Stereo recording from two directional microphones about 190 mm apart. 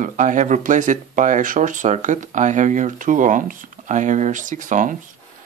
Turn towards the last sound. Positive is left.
turn(degrees=-40)  # may be behind; listen again after turning